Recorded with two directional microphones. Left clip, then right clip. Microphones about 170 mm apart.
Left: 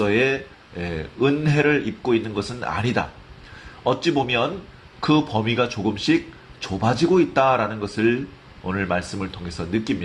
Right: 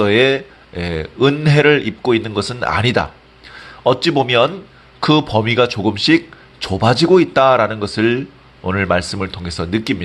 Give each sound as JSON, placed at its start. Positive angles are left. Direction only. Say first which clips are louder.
{"t": 0.0, "sound": "speech", "louder": "right 7 dB", "side_deg": -45}